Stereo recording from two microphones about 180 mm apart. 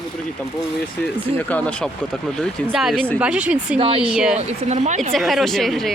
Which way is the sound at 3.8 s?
30° right (ahead or behind).